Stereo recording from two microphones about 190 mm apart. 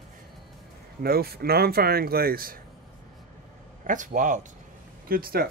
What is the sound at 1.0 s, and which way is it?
Speech, 55° right (ahead or behind).